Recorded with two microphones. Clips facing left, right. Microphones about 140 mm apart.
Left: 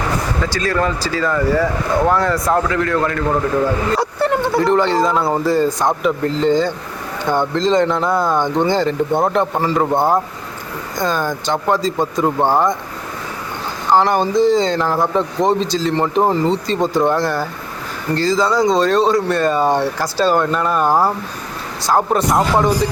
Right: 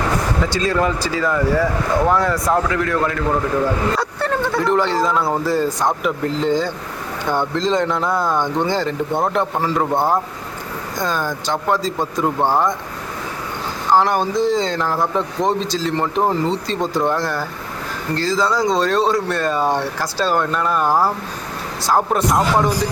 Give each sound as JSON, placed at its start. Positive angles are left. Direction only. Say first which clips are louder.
{"t": 0.5, "sound": "speech", "louder": "even", "side_deg": -20}
{"t": 3.9, "sound": "speech", "louder": "left 4 dB", "side_deg": 25}
{"t": 4.6, "sound": "speech", "louder": "left 2 dB", "side_deg": 0}
{"t": 13.9, "sound": "speech", "louder": "left 2 dB", "side_deg": 0}